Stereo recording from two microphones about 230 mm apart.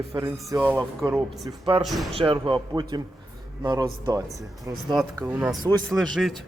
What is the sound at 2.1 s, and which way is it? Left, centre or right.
Speech, right.